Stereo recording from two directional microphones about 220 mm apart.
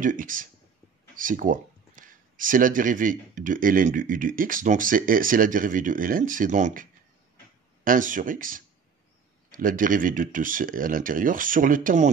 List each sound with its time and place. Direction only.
0.0 s speech: 40° right (ahead or behind)